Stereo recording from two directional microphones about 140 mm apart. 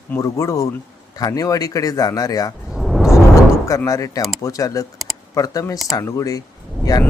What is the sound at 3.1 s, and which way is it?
Music, 25° left (ahead or behind).